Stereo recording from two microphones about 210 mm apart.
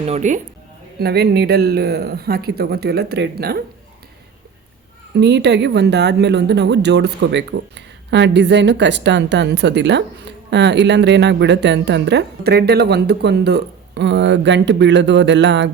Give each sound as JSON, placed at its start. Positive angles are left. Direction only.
{"t": 0.0, "sound": "speech", "side_deg": -35}
{"t": 0.9, "sound": "speech", "side_deg": -50}
{"t": 5.1, "sound": "speech", "side_deg": -55}